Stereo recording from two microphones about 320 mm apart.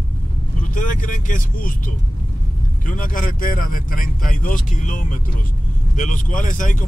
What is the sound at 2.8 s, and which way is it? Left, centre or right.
Speech, left.